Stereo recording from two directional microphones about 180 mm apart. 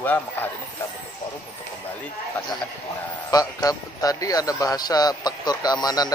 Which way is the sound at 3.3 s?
20° left (ahead or behind).